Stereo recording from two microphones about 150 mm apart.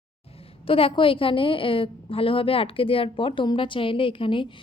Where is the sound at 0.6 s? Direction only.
40° left (ahead or behind).